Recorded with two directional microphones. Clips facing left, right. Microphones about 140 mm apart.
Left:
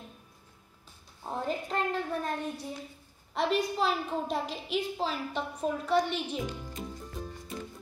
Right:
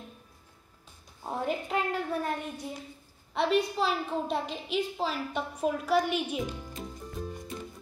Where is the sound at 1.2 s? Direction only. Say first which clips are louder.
Right 2 dB; 10° right (ahead or behind).